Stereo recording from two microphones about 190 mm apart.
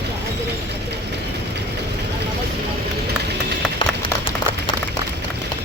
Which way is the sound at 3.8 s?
25° left (ahead or behind).